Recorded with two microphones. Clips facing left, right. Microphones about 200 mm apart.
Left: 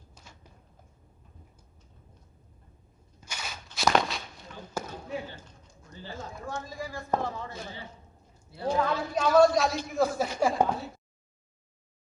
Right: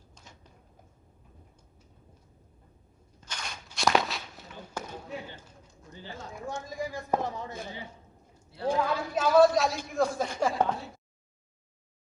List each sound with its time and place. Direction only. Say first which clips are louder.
3.2 s a sound: even; 10° left (ahead or behind)
5.3 s bird: left 1 dB; 15° right (ahead or behind)
6.3 s a woman's voice: right 3 dB; 15° right (ahead or behind); by 10.7 s 10° left (ahead or behind)